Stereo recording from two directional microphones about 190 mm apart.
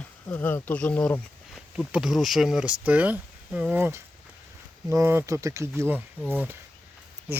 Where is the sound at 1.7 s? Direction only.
5° right (ahead or behind).